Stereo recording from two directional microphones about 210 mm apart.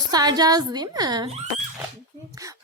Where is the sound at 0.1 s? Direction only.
20° right (ahead or behind).